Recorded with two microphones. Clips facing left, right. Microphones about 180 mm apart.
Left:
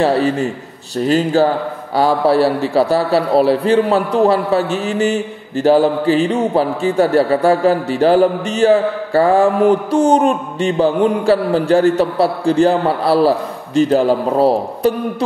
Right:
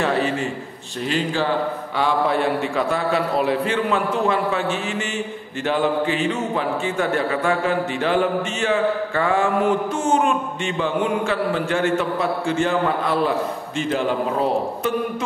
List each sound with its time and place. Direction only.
0.0 s a man's voice: 35° left (ahead or behind)